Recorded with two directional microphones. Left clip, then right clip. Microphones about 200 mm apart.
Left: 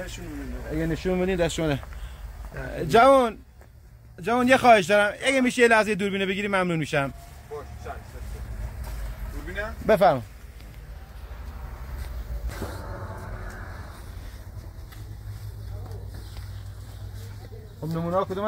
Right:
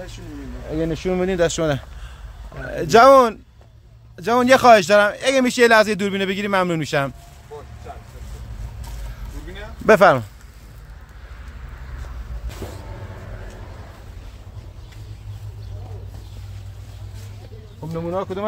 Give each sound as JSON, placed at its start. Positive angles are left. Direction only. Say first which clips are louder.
{"t": 0.7, "sound": "speech", "louder": "right 5 dB", "side_deg": -45}
{"t": 9.8, "sound": "speech", "louder": "right 7 dB", "side_deg": -50}